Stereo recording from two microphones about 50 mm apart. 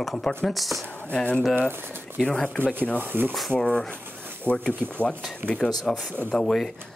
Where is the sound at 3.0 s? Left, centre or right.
Right.